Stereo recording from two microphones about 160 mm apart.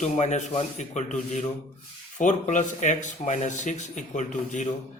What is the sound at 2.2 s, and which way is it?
Speech, 50° left (ahead or behind).